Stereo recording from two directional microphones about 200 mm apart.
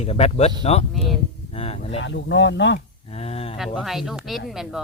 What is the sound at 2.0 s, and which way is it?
Speech, 65° left (ahead or behind).